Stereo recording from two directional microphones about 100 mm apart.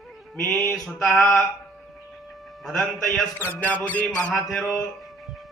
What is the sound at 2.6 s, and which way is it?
Mantra, centre (ahead or behind).